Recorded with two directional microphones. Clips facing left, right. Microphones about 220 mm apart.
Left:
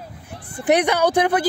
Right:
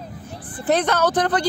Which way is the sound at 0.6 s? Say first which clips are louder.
Left 2 dB; 15° left (ahead or behind).